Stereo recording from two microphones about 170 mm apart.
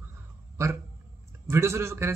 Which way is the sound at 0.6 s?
15° right (ahead or behind).